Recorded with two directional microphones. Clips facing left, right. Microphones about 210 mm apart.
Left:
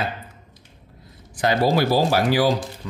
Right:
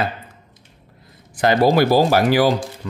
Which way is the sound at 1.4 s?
60° right (ahead or behind).